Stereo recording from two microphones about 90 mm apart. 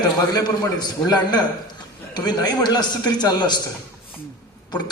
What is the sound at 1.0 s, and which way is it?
A man's voice, 50° left (ahead or behind).